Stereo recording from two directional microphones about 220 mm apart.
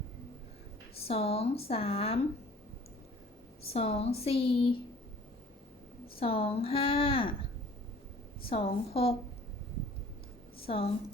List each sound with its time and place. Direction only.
0.9 s speech: 25° left (ahead or behind)
3.7 s speech: 30° left (ahead or behind)
6.1 s speech: 25° left (ahead or behind)
8.4 s speech: 25° left (ahead or behind)
10.7 s speech: 25° left (ahead or behind)